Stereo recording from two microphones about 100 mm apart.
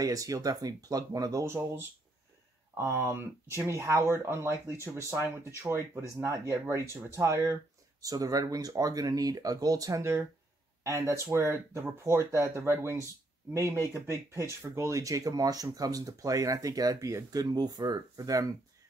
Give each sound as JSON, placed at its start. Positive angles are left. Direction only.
{"t": 0.0, "sound": "speech", "side_deg": -35}